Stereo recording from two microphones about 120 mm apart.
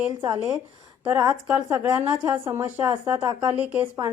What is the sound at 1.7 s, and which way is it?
Speech, 15° right (ahead or behind).